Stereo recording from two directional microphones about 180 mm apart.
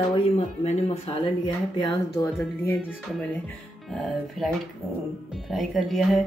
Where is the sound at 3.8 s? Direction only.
Centre (ahead or behind).